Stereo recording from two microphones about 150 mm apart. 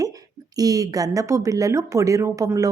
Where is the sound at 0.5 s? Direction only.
25° right (ahead or behind).